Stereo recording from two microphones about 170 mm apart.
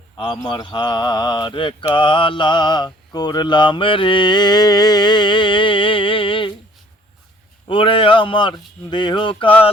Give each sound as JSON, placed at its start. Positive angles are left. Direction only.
{"t": 0.4, "sound": "mantra", "side_deg": 25}
{"t": 7.7, "sound": "mantra", "side_deg": 30}